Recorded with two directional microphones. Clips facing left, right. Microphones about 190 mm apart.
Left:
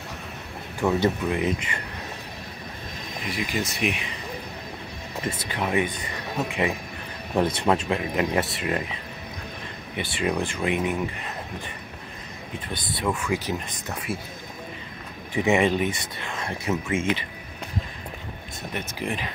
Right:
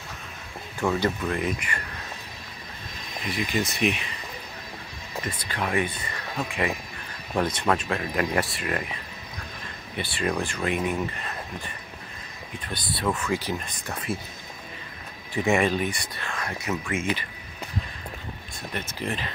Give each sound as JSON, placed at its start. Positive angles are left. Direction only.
{"t": 0.9, "sound": "speech", "side_deg": 20}
{"t": 3.3, "sound": "speech", "side_deg": 10}
{"t": 5.2, "sound": "speech", "side_deg": 20}
{"t": 9.9, "sound": "speech", "side_deg": 15}
{"t": 12.7, "sound": "speech", "side_deg": 15}
{"t": 15.3, "sound": "speech", "side_deg": 20}
{"t": 18.7, "sound": "speech", "side_deg": 15}